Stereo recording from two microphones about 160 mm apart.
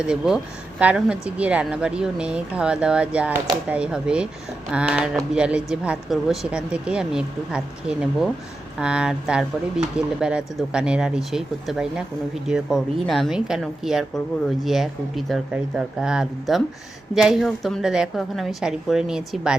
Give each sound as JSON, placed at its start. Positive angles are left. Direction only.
{"t": 0.0, "sound": "a woman's voice", "side_deg": -5}